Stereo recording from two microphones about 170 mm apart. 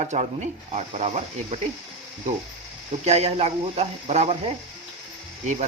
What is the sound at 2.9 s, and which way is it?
Speech, 40° right (ahead or behind).